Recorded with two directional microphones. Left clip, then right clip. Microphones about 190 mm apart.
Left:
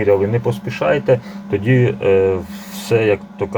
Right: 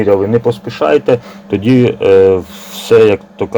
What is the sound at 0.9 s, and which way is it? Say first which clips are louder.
Speech: right 5 dB; 50° right (ahead or behind).